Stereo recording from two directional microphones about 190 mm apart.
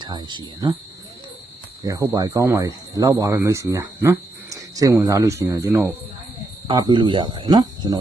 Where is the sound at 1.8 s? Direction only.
20° right (ahead or behind).